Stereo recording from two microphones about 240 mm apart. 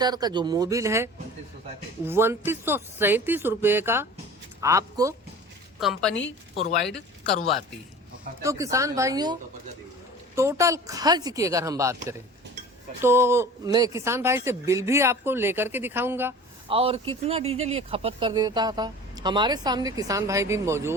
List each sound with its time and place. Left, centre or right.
0.0 s speech: centre
5.8 s a woman's voice: centre
8.4 s speech: centre
13.0 s speech: centre
16.6 s speech: right